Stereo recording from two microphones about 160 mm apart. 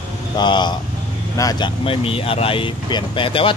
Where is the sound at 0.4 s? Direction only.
30° left (ahead or behind).